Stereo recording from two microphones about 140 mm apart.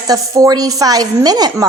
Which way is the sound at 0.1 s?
25° right (ahead or behind).